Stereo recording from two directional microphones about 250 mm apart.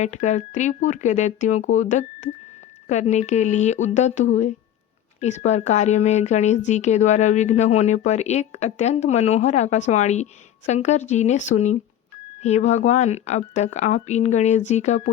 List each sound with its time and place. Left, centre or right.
0.0 s speech: left